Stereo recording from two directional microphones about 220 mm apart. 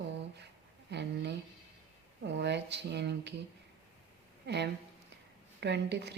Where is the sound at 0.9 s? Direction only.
50° right (ahead or behind).